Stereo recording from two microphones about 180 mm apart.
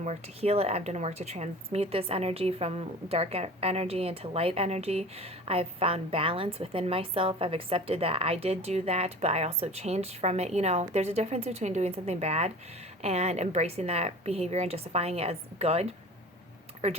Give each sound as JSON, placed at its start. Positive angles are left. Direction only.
{"t": 0.0, "sound": "speech", "side_deg": -35}